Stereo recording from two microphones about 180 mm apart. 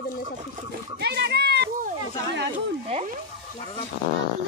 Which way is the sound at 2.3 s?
75° right (ahead or behind).